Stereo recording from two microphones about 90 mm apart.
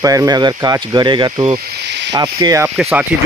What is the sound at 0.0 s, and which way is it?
Speech, 40° right (ahead or behind).